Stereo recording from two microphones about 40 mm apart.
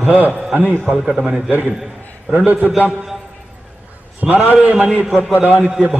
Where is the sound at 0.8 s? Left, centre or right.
Centre.